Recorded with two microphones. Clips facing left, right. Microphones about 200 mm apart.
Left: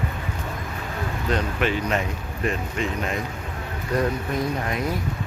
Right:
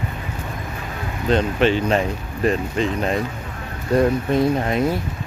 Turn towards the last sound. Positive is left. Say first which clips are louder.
# right 7 dB
turn(degrees=-30)  # may be behind; listen again after turning